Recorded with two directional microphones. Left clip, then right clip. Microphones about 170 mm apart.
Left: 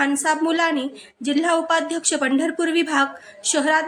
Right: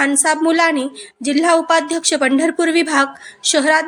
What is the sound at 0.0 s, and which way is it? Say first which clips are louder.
A woman's voice: right 5 dB; 20° right (ahead or behind).